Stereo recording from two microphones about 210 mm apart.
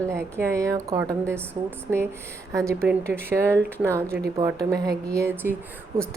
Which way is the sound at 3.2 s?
10° right (ahead or behind).